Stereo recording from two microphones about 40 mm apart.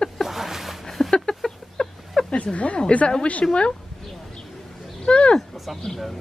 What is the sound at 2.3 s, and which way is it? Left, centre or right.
Speech, left.